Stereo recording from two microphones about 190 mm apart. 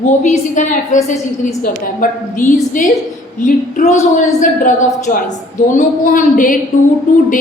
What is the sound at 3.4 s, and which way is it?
A woman's voice, 40° left (ahead or behind).